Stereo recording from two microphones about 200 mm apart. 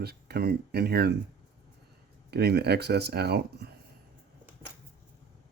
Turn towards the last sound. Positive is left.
turn(degrees=-55)  # may be behind; listen again after turning